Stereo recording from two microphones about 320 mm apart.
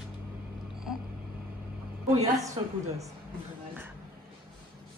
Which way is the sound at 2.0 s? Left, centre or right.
Centre.